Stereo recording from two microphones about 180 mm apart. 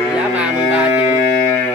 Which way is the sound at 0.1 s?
5° right (ahead or behind).